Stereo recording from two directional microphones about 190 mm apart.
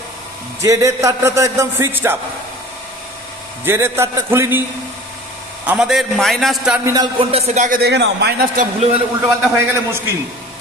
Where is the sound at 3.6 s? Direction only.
15° right (ahead or behind).